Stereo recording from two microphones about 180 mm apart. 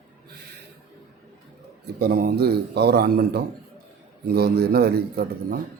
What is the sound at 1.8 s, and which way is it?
A man's voice, 60° right (ahead or behind).